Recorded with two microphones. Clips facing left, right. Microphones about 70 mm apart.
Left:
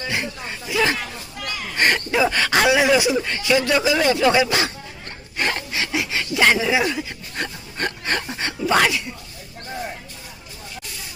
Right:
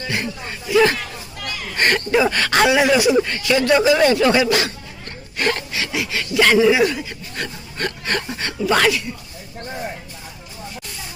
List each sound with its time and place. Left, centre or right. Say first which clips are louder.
0.0 s chatter: right 1 dB; centre
0.8 s speech: right 5 dB; centre
4.3 s speech: right 1 dB; centre
5.4 s rub: right 3 dB; centre
5.7 s a sound: even; left